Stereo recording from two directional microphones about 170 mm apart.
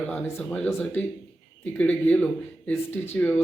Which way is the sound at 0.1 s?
5° left (ahead or behind).